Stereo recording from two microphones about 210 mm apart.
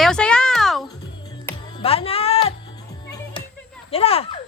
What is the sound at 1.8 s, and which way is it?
Music, 30° left (ahead or behind).